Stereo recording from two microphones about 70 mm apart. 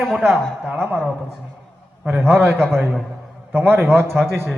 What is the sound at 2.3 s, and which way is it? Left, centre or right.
Speech, right.